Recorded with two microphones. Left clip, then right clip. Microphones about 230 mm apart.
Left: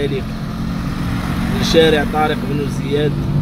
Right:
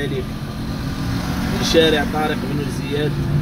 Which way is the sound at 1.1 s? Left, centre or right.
Left.